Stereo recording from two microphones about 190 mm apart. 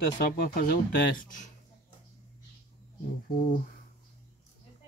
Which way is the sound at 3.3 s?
45° left (ahead or behind).